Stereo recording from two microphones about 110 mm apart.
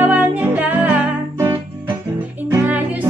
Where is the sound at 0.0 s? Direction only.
15° right (ahead or behind).